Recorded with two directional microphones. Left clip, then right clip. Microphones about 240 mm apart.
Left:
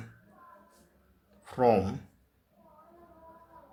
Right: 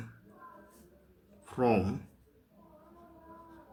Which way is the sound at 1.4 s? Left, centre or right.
Centre.